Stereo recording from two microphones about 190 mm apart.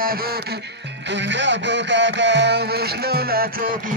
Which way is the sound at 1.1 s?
70° right (ahead or behind).